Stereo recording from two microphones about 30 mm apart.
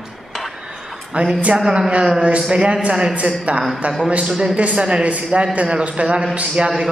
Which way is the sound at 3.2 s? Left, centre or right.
Right.